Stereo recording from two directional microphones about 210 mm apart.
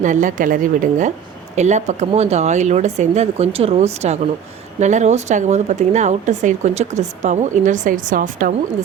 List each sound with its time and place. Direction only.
0.0 s speech: 35° right (ahead or behind)